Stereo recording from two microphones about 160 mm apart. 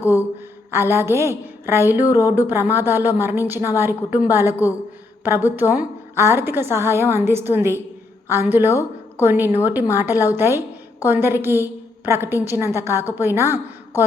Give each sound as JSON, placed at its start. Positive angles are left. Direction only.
{"t": 0.7, "sound": "a woman's voice", "side_deg": -15}
{"t": 5.5, "sound": "a woman's voice", "side_deg": -15}